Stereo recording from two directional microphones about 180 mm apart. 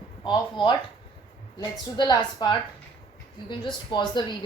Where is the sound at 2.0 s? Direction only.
25° left (ahead or behind).